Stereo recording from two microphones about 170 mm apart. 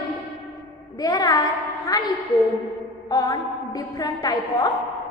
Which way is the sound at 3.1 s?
25° left (ahead or behind).